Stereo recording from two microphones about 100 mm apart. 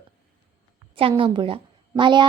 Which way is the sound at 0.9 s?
65° right (ahead or behind).